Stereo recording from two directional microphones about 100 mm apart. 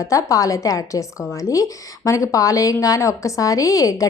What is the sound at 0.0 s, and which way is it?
A woman's voice, 35° left (ahead or behind).